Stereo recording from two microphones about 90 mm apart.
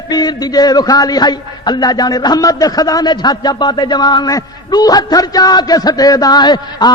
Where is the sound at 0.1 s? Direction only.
50° left (ahead or behind).